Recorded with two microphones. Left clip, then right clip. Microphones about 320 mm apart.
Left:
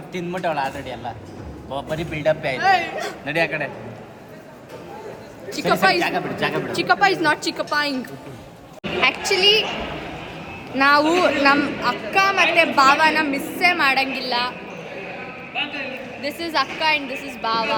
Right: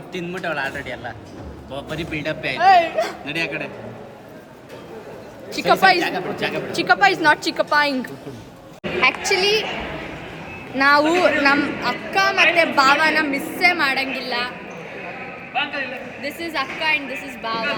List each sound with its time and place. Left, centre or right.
0.1 s speech: centre
2.6 s a woman's voice: centre
3.2 s a woman's voice: left
5.5 s a woman's voice: centre
6.0 s a woman's voice: left
6.7 s a woman's voice: centre
10.8 s a woman's voice: centre
15.5 s a woman's voice: centre